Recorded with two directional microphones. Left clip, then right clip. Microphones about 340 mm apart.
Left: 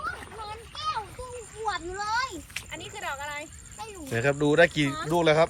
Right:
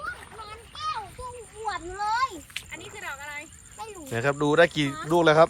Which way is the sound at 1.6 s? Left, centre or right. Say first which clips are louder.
Right 2 dB; right.